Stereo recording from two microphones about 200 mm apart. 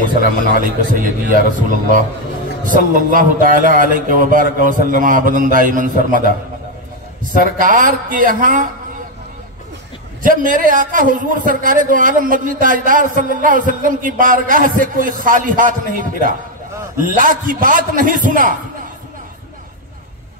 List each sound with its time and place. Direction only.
0.1 s a man's voice: 40° right (ahead or behind)
7.4 s a man's voice: 40° right (ahead or behind)
10.2 s a man's voice: 45° right (ahead or behind)